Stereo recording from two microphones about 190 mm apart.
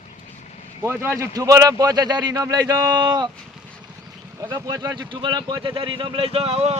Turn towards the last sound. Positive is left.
turn(degrees=-30)  # may be behind; listen again after turning